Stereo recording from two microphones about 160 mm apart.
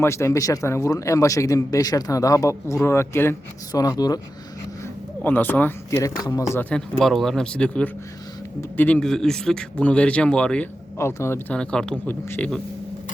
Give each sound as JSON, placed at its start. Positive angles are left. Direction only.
{"t": 0.0, "sound": "speech", "side_deg": 15}
{"t": 5.2, "sound": "speech", "side_deg": 10}